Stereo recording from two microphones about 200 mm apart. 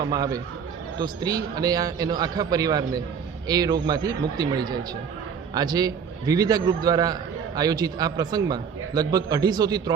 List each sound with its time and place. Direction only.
0.0 s a man's voice: 20° right (ahead or behind)